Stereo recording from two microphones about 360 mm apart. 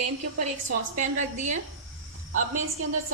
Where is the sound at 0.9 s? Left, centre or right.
Right.